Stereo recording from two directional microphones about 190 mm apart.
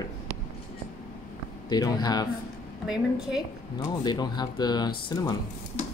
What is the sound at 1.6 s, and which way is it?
Speech, 20° left (ahead or behind).